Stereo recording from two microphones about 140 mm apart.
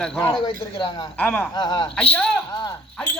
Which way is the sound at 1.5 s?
30° left (ahead or behind).